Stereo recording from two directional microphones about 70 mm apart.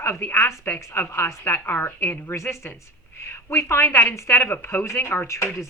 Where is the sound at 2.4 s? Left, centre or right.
Left.